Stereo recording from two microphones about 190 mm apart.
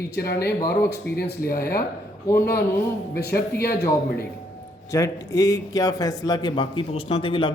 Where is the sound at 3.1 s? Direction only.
55° left (ahead or behind).